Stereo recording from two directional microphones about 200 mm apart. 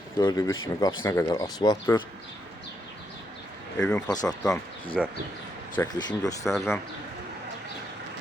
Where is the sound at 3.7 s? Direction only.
5° left (ahead or behind).